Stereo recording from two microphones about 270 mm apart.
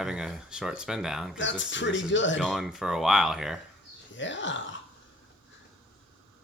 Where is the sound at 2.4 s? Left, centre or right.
Centre.